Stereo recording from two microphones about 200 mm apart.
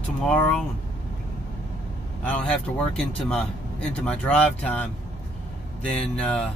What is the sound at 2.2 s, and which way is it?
Speech, 5° left (ahead or behind).